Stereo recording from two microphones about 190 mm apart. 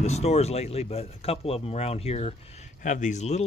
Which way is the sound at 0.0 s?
35° left (ahead or behind).